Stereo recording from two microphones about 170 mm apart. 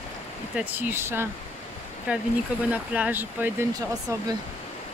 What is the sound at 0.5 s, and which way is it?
Speech, 10° right (ahead or behind).